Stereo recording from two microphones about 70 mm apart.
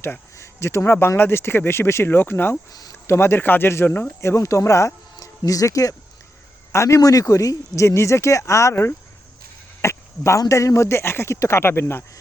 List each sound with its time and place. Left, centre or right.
0.0 s speech: left
4.2 s speech: left
9.8 s cricket: left
10.5 s speech: left